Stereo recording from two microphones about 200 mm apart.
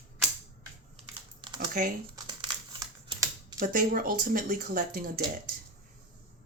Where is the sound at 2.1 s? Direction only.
20° right (ahead or behind).